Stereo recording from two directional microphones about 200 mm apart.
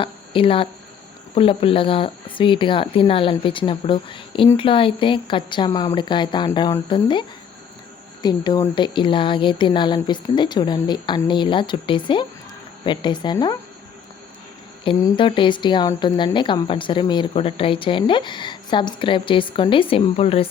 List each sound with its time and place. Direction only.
0.0 s speech: 25° left (ahead or behind)
14.8 s speech: 25° left (ahead or behind)